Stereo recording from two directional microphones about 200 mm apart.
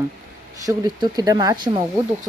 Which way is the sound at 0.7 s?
20° right (ahead or behind).